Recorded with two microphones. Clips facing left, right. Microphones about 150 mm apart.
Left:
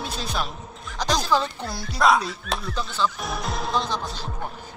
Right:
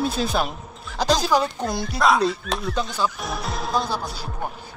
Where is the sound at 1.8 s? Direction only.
Centre (ahead or behind).